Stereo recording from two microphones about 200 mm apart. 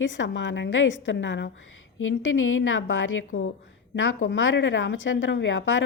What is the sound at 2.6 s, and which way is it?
A woman's voice, 75° left (ahead or behind).